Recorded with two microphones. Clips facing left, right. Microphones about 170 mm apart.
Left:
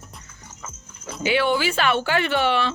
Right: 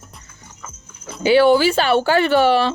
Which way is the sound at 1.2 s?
35° right (ahead or behind).